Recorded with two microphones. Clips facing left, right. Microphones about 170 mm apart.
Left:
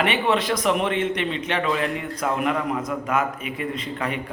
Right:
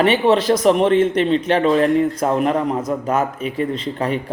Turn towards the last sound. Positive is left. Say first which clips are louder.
# right 6 dB
turn(degrees=-35)  # may be behind; listen again after turning